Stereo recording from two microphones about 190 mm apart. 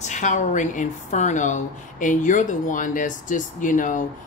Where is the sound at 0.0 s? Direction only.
40° left (ahead or behind).